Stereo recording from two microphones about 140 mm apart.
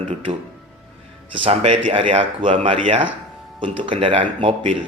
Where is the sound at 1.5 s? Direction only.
45° right (ahead or behind).